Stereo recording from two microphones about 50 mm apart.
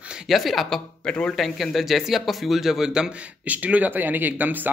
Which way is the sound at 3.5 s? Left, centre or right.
Right.